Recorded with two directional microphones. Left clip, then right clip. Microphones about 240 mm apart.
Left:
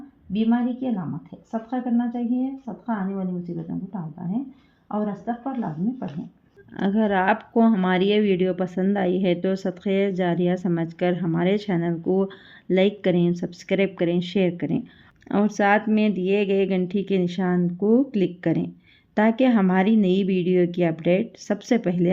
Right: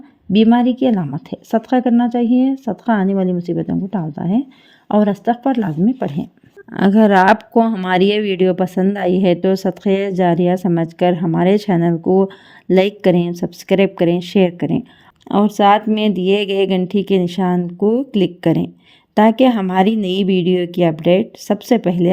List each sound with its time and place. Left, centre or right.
0.3 s speech: right
6.7 s speech: right